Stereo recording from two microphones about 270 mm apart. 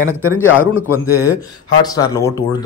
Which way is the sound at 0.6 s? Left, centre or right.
Centre.